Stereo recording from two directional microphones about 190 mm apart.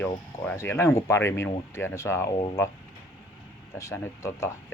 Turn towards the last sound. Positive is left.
turn(degrees=15)  # may be behind; listen again after turning